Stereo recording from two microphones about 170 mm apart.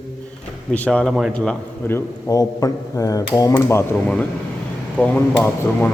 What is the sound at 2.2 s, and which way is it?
A man's voice, 20° left (ahead or behind).